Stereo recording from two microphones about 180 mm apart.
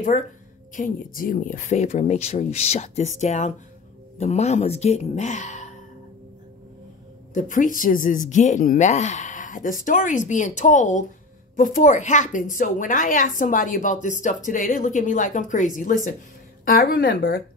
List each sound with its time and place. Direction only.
0.7 s speech: 50° left (ahead or behind)
7.3 s speech: 45° left (ahead or behind)